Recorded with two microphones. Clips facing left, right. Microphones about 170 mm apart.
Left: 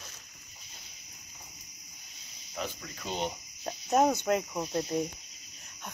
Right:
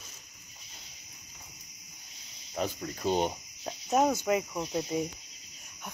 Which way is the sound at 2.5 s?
40° right (ahead or behind).